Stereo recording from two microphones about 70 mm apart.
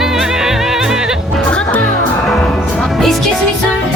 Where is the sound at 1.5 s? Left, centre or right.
Centre.